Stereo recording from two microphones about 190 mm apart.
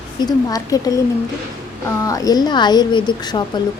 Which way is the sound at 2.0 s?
20° left (ahead or behind).